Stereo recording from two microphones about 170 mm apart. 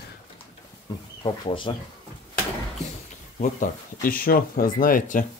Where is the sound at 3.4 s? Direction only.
55° left (ahead or behind).